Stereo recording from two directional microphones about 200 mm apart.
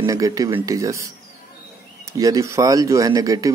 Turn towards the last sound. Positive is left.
turn(degrees=-15)  # may be behind; listen again after turning